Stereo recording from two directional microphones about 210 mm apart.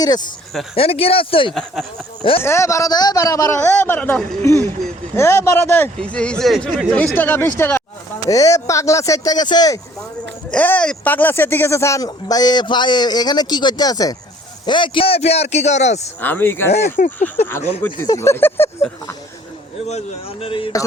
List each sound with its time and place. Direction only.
0.0 s a man's voice: 20° left (ahead or behind)
1.5 s speech: centre (ahead or behind)
2.4 s speech: 15° left (ahead or behind)
10.5 s a man's voice: 5° left (ahead or behind); by 16.0 s 35° left (ahead or behind)
16.2 s speech: 10° left (ahead or behind)
16.7 s speech: 35° left (ahead or behind)
18.0 s speech: 15° left (ahead or behind)
19.9 s a man's voice: 30° left (ahead or behind)